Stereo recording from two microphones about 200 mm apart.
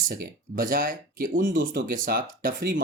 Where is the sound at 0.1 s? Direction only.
45° right (ahead or behind).